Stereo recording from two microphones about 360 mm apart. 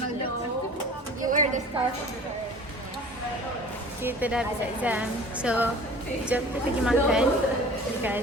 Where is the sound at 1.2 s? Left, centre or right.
Right.